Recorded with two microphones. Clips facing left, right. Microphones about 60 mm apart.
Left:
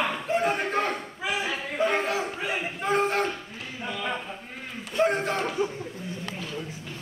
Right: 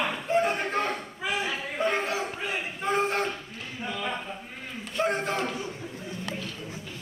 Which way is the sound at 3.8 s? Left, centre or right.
Centre.